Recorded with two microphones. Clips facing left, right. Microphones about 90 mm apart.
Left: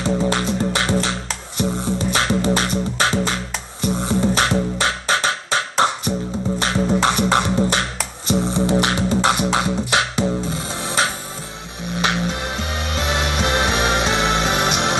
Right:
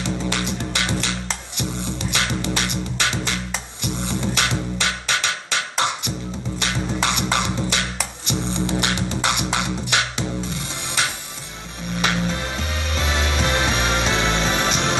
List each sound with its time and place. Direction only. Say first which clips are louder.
0.0 s music: left 5 dB; 40° left (ahead or behind)
11.9 s music: left 1 dB; 20° left (ahead or behind)